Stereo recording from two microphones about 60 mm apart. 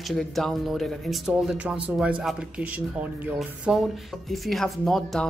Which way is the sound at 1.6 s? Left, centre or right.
Right.